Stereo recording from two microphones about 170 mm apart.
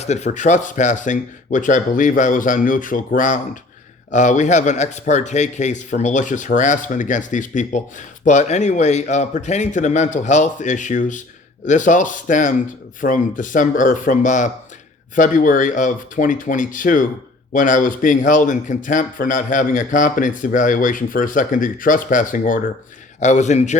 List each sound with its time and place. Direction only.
0.0 s speech: 40° left (ahead or behind)